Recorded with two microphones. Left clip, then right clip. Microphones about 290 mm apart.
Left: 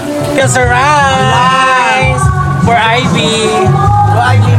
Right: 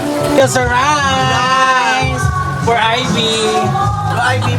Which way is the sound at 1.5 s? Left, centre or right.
Right.